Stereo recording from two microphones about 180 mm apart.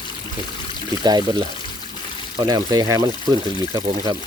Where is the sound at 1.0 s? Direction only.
25° right (ahead or behind).